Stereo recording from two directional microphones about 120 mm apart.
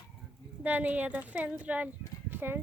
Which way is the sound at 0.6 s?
15° right (ahead or behind).